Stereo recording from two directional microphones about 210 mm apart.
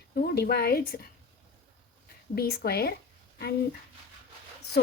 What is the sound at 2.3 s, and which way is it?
Speech, 45° left (ahead or behind).